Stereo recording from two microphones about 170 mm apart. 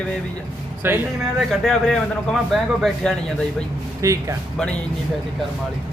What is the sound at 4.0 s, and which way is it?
Speech, 20° right (ahead or behind).